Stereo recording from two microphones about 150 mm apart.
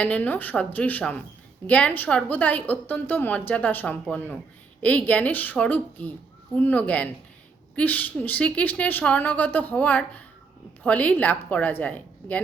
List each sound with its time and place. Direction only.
0.0 s a woman's voice: 10° left (ahead or behind)